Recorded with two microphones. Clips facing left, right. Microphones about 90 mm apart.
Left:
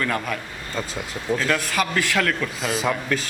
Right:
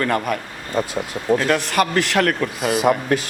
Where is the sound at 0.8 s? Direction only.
15° right (ahead or behind).